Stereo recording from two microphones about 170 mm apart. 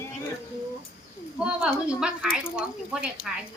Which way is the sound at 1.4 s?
5° right (ahead or behind).